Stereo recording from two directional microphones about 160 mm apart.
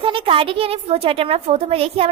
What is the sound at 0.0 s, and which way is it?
A woman's voice, 35° right (ahead or behind).